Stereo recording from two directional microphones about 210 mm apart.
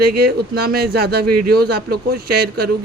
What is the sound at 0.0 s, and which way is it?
Speech, 50° right (ahead or behind).